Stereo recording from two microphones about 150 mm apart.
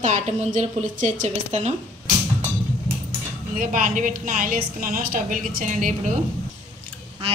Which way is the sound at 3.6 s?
60° right (ahead or behind).